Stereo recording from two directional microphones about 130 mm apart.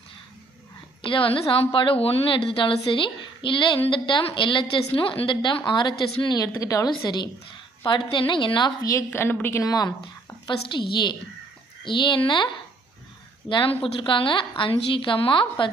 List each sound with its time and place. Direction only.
1.0 s a woman's voice: 40° left (ahead or behind)
13.5 s a woman's voice: 40° left (ahead or behind)